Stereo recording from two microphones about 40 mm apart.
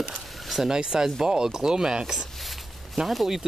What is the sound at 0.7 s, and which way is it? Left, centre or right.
Speech, centre.